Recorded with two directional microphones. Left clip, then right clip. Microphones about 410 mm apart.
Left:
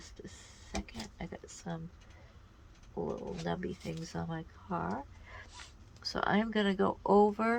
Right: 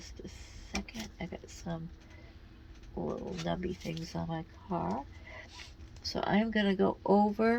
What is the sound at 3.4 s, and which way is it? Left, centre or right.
Speech, left.